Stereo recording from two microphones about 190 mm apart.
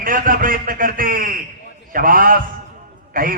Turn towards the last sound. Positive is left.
turn(degrees=-45)  # may be behind; listen again after turning